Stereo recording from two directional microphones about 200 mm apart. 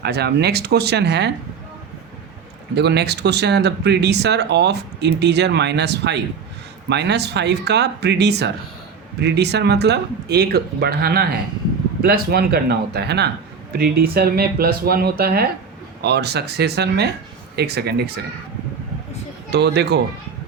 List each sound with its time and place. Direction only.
0.0 s speech: 55° right (ahead or behind)
2.7 s speech: 55° right (ahead or behind)
19.5 s speech: 55° right (ahead or behind)